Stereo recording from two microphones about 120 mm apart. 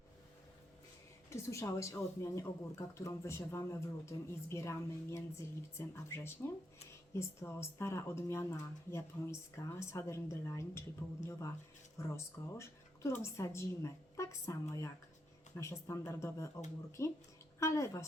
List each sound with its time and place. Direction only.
1.3 s a woman's voice: 25° left (ahead or behind)